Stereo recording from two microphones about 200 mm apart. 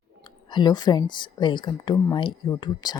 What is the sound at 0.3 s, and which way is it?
Speech, 20° left (ahead or behind).